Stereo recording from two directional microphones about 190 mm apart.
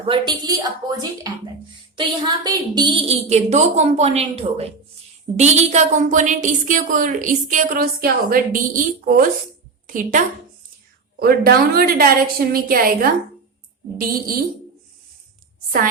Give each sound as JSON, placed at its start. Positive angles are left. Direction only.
{"t": 0.0, "sound": "a woman's voice", "side_deg": -25}